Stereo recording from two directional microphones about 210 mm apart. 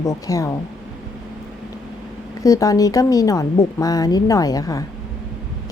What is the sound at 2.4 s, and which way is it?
A woman's voice, 15° left (ahead or behind).